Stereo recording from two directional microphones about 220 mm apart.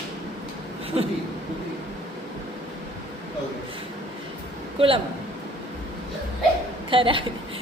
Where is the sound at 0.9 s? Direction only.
25° right (ahead or behind).